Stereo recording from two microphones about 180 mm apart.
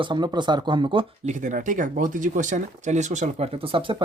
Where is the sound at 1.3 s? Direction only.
45° right (ahead or behind).